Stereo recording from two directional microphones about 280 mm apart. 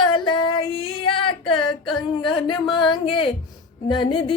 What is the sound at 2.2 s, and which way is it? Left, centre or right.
Music, centre.